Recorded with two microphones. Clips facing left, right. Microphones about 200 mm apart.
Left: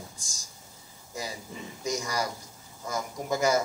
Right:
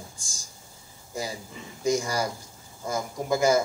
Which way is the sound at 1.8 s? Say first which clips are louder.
Right 5 dB; 30° right (ahead or behind).